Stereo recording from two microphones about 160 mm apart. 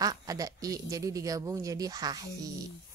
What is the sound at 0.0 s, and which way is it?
Speech, 25° right (ahead or behind).